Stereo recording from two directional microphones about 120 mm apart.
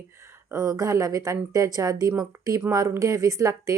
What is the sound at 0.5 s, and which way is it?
Speech, 30° right (ahead or behind).